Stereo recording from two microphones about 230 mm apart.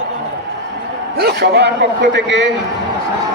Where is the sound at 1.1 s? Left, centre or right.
Right.